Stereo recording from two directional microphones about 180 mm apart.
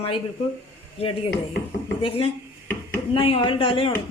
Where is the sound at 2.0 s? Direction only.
30° left (ahead or behind).